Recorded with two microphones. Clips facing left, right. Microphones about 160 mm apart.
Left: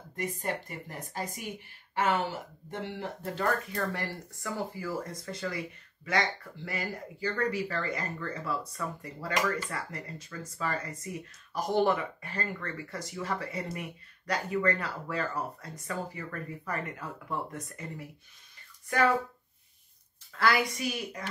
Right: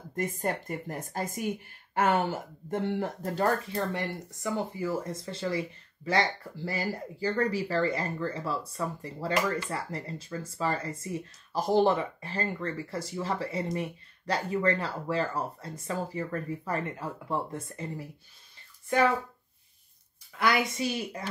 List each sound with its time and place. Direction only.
0.1 s speech: 45° right (ahead or behind)
3.7 s speech: 20° right (ahead or behind)
20.3 s speech: 20° right (ahead or behind)